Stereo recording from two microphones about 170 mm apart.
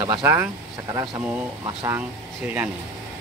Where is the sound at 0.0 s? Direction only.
25° right (ahead or behind).